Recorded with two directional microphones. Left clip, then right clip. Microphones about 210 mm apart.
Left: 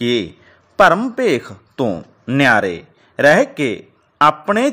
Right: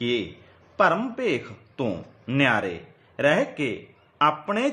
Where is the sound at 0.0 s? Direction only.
35° left (ahead or behind).